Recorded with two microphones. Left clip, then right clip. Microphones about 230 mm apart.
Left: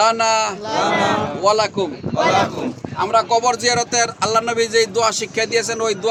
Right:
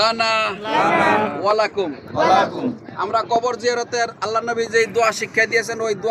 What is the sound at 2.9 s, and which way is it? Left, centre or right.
Speech, left.